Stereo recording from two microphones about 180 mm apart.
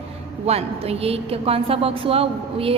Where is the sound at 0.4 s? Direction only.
35° right (ahead or behind).